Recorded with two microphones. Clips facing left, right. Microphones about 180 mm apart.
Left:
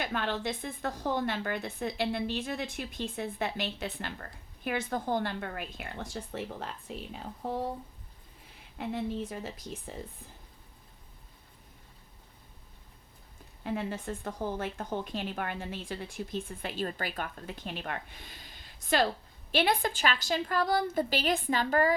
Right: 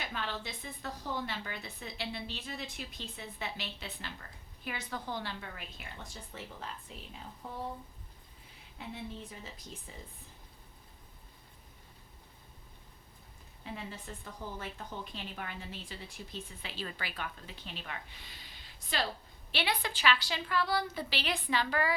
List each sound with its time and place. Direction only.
0.0 s a woman's voice: 55° left (ahead or behind)
8.8 s speech: 65° left (ahead or behind)
13.7 s a woman's voice: 55° left (ahead or behind)